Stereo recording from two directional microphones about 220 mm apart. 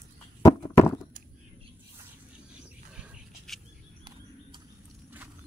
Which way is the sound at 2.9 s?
5° right (ahead or behind).